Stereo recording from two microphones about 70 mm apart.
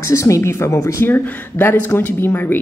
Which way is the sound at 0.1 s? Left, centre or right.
Left.